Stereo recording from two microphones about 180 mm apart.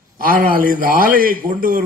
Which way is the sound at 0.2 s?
50° right (ahead or behind).